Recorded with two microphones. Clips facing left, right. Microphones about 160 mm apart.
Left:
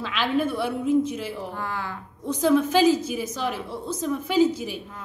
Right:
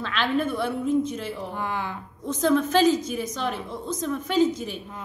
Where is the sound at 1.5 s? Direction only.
20° right (ahead or behind).